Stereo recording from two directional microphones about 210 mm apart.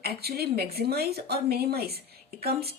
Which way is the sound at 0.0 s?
50° right (ahead or behind).